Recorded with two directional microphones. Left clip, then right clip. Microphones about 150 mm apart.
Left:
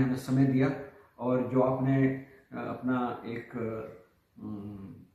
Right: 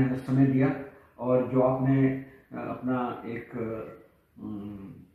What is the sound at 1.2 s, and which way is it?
Speech, centre (ahead or behind).